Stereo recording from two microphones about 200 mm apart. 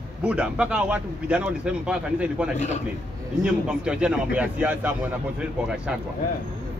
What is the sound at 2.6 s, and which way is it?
Speech, 35° left (ahead or behind).